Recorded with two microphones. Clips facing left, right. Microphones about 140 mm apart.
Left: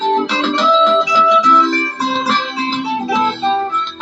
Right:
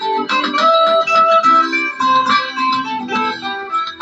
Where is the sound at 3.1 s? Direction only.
15° left (ahead or behind).